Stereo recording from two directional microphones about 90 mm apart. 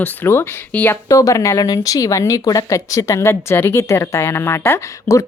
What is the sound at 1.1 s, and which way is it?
Speech, 35° left (ahead or behind).